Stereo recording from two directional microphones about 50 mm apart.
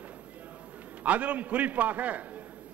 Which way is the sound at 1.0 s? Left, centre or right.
Right.